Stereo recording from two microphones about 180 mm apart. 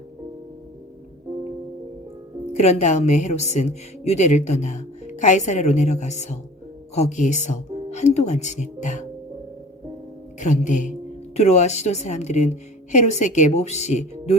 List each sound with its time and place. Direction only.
2.5 s speech: 40° left (ahead or behind)
10.4 s speech: 45° left (ahead or behind)